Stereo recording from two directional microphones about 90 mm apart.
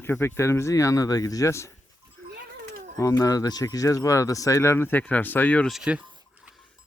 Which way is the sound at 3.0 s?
40° left (ahead or behind).